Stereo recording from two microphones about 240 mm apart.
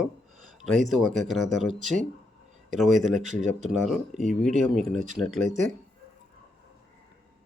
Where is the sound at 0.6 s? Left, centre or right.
Centre.